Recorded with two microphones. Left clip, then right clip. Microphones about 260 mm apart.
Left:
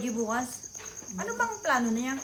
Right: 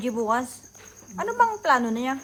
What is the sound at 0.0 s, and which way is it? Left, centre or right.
Speech, centre.